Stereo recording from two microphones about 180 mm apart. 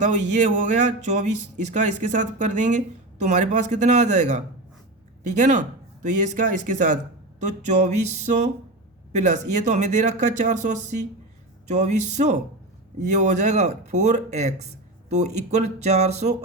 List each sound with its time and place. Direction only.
0.0 s speech: 40° right (ahead or behind)